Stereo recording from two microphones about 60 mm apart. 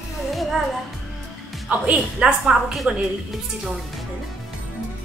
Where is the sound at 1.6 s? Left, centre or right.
Centre.